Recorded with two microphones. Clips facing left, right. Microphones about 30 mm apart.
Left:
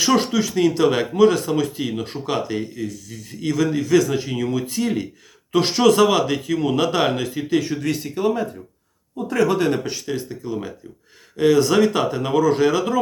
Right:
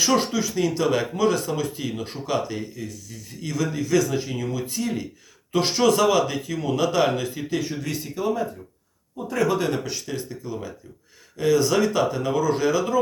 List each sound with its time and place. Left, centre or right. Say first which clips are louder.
0.2 s speech: left 4 dB; left
4.4 s a man's voice: left 5 dB; left
5.5 s a man's voice: left 4 dB; left
7.6 s a man's voice: left 5 dB; left
9.5 s a man's voice: left 4 dB; left